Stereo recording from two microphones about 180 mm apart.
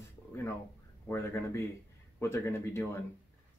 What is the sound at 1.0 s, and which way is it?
Speech, 15° left (ahead or behind).